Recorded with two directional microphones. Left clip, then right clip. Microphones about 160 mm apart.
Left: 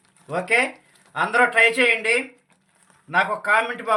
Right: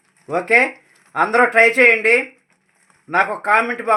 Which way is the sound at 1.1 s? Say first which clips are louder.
Right 4 dB; 60° right (ahead or behind).